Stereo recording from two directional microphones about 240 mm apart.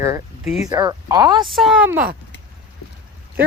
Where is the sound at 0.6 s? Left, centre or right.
Centre.